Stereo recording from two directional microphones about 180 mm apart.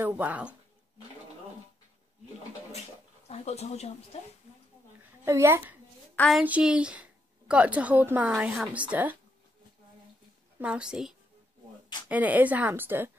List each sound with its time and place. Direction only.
0.0 s a woman's voice: 10° right (ahead or behind)
3.3 s speech: 35° left (ahead or behind)
5.2 s a woman's voice: 15° right (ahead or behind)
6.1 s a child's voice: centre (ahead or behind)
10.6 s a woman's voice: 5° right (ahead or behind)